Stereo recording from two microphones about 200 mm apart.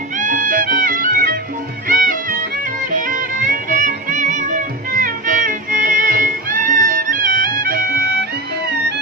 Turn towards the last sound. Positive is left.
turn(degrees=-45)  # may be behind; listen again after turning